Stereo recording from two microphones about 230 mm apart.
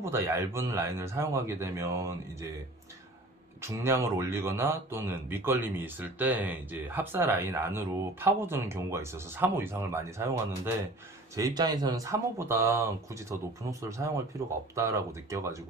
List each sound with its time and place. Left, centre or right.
0.0 s speech: centre
3.6 s speech: centre